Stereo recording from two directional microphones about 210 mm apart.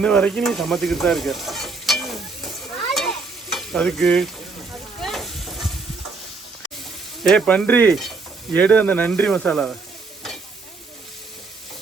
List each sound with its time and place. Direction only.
0.0 s speech: 5° left (ahead or behind)
2.9 s stir: centre (ahead or behind)
4.9 s sizzle: centre (ahead or behind)
7.2 s speech: 5° left (ahead or behind)